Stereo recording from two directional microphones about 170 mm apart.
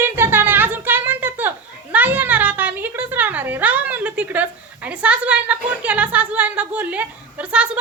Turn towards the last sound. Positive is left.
turn(degrees=-5)  # may be behind; listen again after turning